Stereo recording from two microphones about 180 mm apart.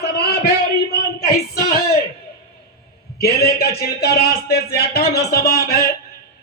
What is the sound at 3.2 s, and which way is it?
Music, 60° left (ahead or behind).